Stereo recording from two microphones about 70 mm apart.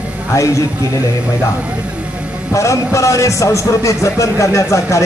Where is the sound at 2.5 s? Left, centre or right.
Left.